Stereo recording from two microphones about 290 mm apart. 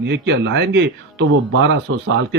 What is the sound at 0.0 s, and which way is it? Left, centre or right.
Speech, right.